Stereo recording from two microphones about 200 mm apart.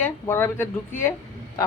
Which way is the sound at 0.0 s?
10° left (ahead or behind).